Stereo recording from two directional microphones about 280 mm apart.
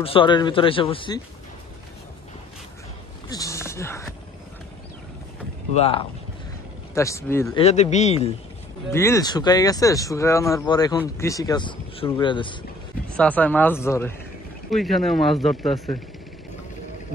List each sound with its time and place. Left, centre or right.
0.0 s speech: centre
3.3 s a sound: centre
5.8 s speech: left
6.9 s speech: centre
7.5 s speech: left
8.9 s speech: centre
13.1 s speech: centre